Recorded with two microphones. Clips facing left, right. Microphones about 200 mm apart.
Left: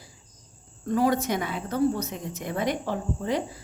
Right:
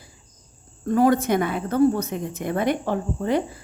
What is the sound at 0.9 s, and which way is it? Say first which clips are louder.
A woman's voice: right 5 dB; 50° right (ahead or behind).